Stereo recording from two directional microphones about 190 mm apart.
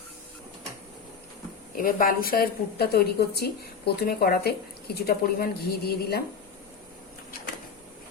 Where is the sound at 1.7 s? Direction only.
50° left (ahead or behind).